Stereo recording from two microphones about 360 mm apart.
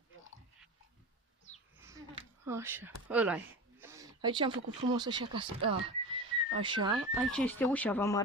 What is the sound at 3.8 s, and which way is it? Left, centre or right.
Speech, centre.